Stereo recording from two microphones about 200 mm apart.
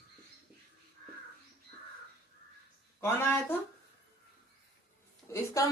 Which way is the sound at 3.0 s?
15° left (ahead or behind).